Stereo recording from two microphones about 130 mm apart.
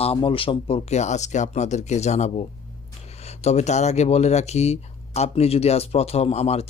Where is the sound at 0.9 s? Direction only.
60° left (ahead or behind).